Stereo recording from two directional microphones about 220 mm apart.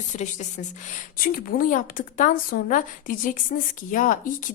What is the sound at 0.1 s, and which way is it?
Speech, 35° left (ahead or behind).